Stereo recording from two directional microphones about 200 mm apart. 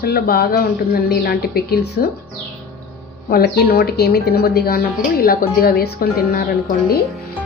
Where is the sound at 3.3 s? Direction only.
50° left (ahead or behind).